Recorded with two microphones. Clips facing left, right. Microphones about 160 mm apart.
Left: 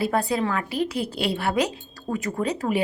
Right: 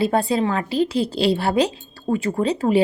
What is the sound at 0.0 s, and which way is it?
A woman's voice, 25° right (ahead or behind).